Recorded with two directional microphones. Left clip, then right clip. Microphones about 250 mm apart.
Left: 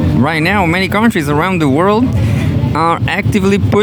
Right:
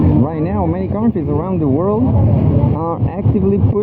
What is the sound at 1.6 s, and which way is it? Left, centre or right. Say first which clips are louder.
Speech: left 4 dB; left.